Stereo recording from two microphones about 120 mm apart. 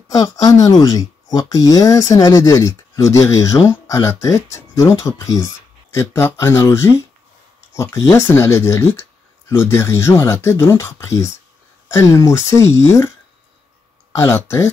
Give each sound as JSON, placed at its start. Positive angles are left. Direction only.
{"t": 0.1, "sound": "speech", "side_deg": 30}
{"t": 14.1, "sound": "speech", "side_deg": 25}